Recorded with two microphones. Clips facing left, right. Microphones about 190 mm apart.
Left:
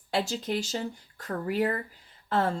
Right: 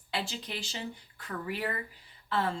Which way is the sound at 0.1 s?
45° left (ahead or behind).